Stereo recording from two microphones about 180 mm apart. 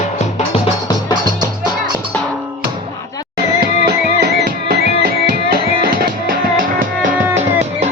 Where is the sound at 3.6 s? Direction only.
55° right (ahead or behind).